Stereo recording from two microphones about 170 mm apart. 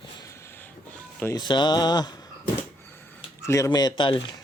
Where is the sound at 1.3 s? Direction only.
25° left (ahead or behind).